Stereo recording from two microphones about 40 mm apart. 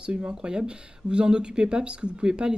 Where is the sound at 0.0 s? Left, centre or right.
Right.